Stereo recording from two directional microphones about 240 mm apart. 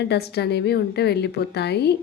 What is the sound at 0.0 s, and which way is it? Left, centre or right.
A woman's voice, left.